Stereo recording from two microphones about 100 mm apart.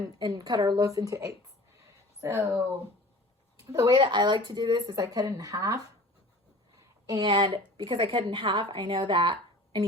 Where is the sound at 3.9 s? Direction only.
50° right (ahead or behind).